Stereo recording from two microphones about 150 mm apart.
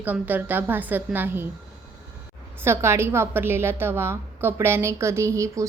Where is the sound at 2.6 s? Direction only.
15° right (ahead or behind).